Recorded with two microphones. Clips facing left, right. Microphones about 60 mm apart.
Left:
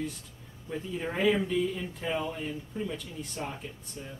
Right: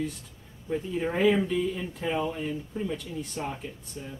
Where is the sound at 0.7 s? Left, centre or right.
Centre.